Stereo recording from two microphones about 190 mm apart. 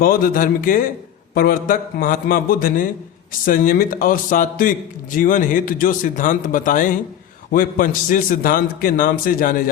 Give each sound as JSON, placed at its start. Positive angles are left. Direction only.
{"t": 0.0, "sound": "a man's voice", "side_deg": 50}